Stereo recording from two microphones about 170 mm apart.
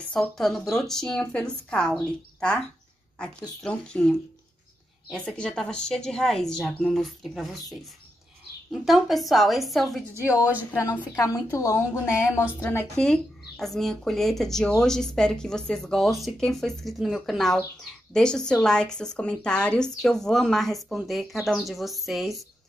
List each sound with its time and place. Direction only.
0.1 s speech: centre (ahead or behind)
5.1 s speech: 5° left (ahead or behind)
8.8 s speech: centre (ahead or behind)
10.7 s a woman's voice: 20° left (ahead or behind); by 22.4 s centre (ahead or behind)